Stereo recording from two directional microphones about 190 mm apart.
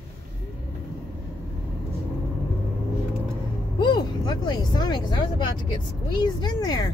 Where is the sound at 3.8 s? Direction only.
25° left (ahead or behind).